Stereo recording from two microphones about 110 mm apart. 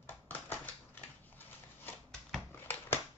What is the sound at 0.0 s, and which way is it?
Typewriter, 15° left (ahead or behind).